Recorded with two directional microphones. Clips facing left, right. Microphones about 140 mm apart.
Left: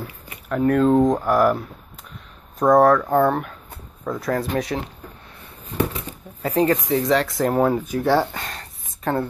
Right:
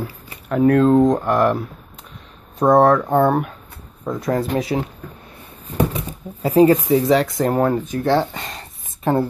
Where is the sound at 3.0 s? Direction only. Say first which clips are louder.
Right 2 dB; 15° right (ahead or behind).